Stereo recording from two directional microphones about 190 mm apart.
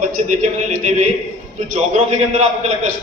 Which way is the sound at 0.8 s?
40° right (ahead or behind).